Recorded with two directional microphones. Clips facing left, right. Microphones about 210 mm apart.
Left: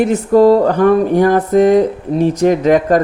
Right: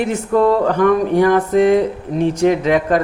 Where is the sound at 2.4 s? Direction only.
40° left (ahead or behind).